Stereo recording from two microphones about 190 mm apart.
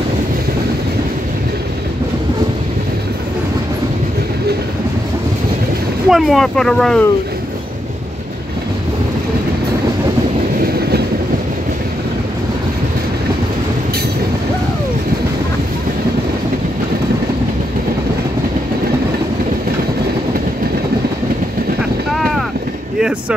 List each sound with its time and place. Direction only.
6.0 s speech: centre (ahead or behind)
10.6 s train: 55° right (ahead or behind)